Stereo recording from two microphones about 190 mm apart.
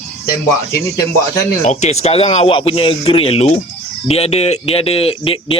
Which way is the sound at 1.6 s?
40° left (ahead or behind).